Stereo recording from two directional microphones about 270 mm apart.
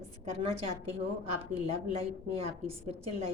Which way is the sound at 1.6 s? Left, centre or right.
Right.